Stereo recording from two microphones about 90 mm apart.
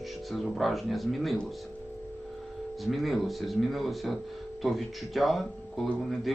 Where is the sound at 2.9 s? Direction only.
Centre (ahead or behind).